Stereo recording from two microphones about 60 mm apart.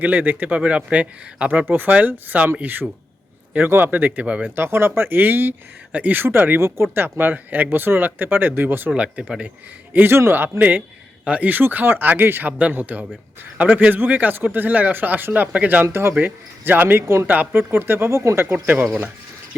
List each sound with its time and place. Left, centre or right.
0.0 s speech: right
3.8 s speech: right
4.5 s speech: right
9.2 s speech: right
9.9 s speech: right
15.9 s speech: right
16.1 s speech: right